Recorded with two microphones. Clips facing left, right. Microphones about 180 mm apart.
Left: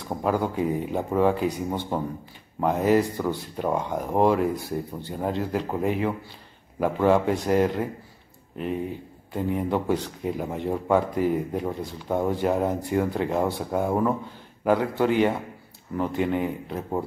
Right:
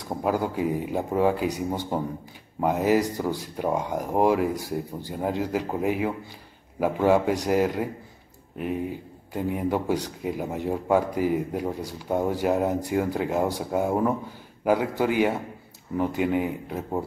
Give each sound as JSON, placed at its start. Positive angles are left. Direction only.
{"t": 0.1, "sound": "speech", "side_deg": -5}
{"t": 9.3, "sound": "speech", "side_deg": -5}